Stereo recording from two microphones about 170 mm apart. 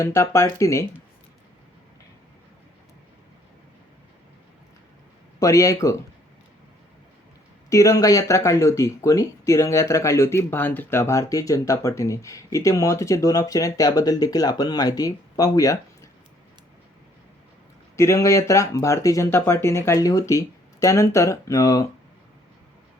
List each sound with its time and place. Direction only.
0.0 s speech: 15° left (ahead or behind)
5.4 s speech: 20° left (ahead or behind)
7.7 s speech: 20° left (ahead or behind)
17.9 s speech: 15° left (ahead or behind)